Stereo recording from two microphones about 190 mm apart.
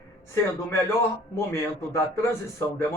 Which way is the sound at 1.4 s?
15° left (ahead or behind).